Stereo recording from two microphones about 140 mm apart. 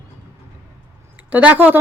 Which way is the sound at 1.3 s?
10° right (ahead or behind).